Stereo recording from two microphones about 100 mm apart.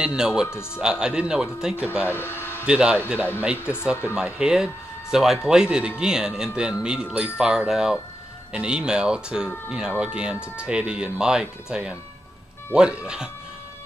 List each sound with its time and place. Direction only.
0.0 s a man's voice: 5° right (ahead or behind)
2.0 s speech: 20° left (ahead or behind)
2.6 s a man's voice: 10° right (ahead or behind)
3.5 s speech: 20° left (ahead or behind)
4.1 s a man's voice: 10° right (ahead or behind)